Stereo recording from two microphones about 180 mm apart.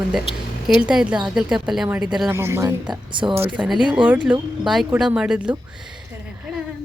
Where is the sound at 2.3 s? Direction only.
15° right (ahead or behind).